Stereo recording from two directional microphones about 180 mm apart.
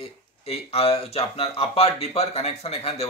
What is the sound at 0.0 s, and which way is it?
Speech, 35° left (ahead or behind).